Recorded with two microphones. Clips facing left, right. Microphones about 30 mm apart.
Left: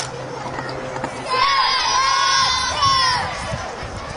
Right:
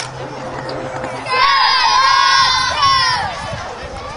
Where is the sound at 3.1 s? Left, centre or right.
Right.